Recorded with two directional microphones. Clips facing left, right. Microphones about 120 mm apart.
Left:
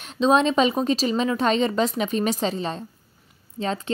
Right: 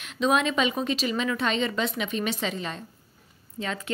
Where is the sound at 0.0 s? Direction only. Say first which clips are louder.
Left 5 dB; 30° left (ahead or behind).